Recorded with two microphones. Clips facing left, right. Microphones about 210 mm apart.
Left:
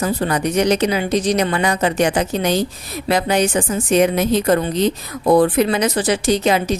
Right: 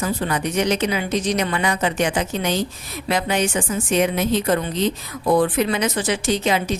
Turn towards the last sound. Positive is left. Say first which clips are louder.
# left 4 dB
turn(degrees=40)  # may be behind; listen again after turning